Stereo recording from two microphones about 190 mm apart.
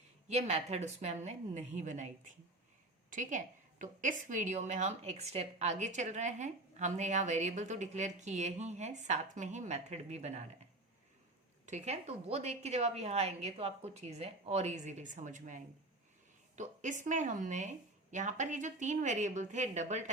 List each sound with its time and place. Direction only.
0.3 s a woman's voice: 35° right (ahead or behind)
11.6 s a woman's voice: 35° right (ahead or behind)